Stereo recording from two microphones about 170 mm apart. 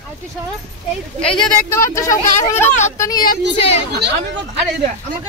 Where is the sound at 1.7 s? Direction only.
15° left (ahead or behind).